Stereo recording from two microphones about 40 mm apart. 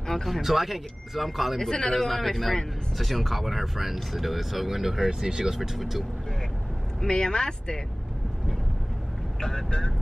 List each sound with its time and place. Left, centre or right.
0.0 s a sound: centre
0.3 s speech: centre
1.6 s speech: centre
2.0 s speech: centre
5.6 s speech: centre
7.0 s speech: centre
9.4 s speech: centre
9.7 s speech: centre